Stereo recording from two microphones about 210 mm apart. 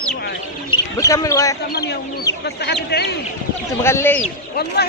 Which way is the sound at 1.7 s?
50° left (ahead or behind).